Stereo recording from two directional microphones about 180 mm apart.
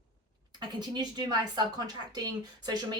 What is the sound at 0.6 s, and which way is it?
Speech, 25° right (ahead or behind).